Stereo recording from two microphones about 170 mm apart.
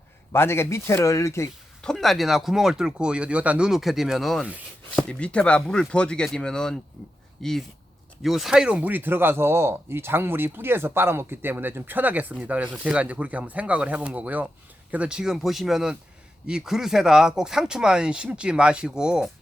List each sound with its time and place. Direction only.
0.3 s speech: 15° left (ahead or behind)
1.8 s speech: centre (ahead or behind)